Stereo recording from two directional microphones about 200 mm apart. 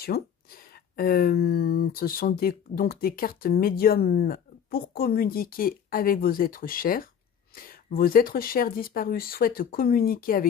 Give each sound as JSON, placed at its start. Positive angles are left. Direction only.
{"t": 0.0, "sound": "speech", "side_deg": 50}